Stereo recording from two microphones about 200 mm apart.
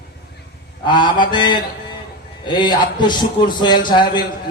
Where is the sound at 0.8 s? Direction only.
20° left (ahead or behind).